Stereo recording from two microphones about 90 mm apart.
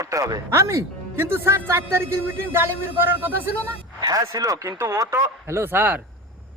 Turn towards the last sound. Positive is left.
turn(degrees=-20)  # may be behind; listen again after turning